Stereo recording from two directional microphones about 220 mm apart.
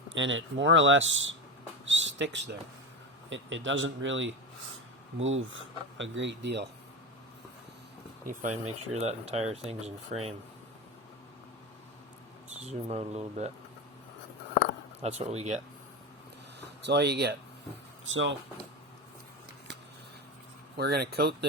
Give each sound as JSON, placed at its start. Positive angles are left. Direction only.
{"t": 0.1, "sound": "speech", "side_deg": -60}
{"t": 1.8, "sound": "a sound", "side_deg": -55}
{"t": 3.2, "sound": "speech", "side_deg": -55}
{"t": 8.2, "sound": "speech", "side_deg": -35}
{"t": 12.5, "sound": "speech", "side_deg": -30}
{"t": 15.0, "sound": "speech", "side_deg": -30}
{"t": 16.8, "sound": "speech", "side_deg": -50}
{"t": 18.0, "sound": "speech", "side_deg": -60}
{"t": 20.7, "sound": "speech", "side_deg": -45}